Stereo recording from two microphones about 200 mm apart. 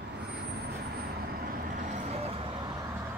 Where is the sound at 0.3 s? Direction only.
55° right (ahead or behind); by 2.7 s 25° right (ahead or behind).